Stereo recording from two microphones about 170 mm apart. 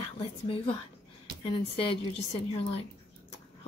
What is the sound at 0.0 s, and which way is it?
Speech, 35° left (ahead or behind).